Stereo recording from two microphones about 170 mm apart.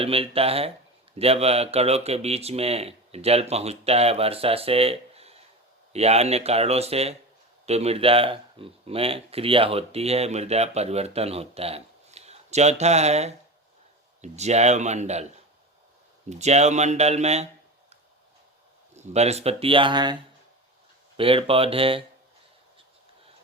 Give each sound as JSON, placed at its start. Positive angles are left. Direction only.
{"t": 0.0, "sound": "speech", "side_deg": -35}
{"t": 16.4, "sound": "speech", "side_deg": -40}
{"t": 18.9, "sound": "speech", "side_deg": -40}
{"t": 21.2, "sound": "speech", "side_deg": -30}